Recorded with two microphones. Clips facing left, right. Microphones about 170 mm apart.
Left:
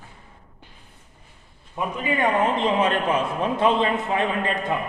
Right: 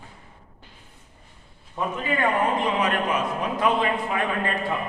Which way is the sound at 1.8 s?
15° left (ahead or behind).